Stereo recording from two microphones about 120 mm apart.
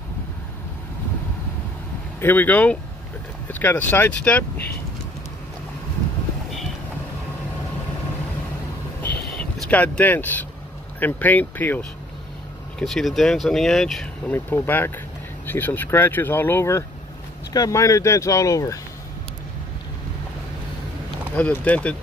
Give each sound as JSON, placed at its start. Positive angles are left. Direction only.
{"t": 2.1, "sound": "speech", "side_deg": 15}
{"t": 9.0, "sound": "vehicle", "side_deg": 10}
{"t": 11.0, "sound": "speech", "side_deg": 15}
{"t": 12.7, "sound": "speech", "side_deg": 0}
{"t": 14.3, "sound": "speech", "side_deg": 15}
{"t": 21.4, "sound": "speech", "side_deg": 10}